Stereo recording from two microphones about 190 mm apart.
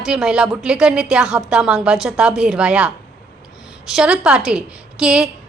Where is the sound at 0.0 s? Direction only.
5° right (ahead or behind).